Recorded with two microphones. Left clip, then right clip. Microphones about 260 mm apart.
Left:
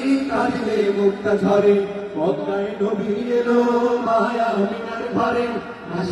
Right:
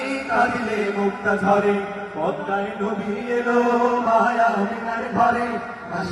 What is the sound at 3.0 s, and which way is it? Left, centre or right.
Chant, centre.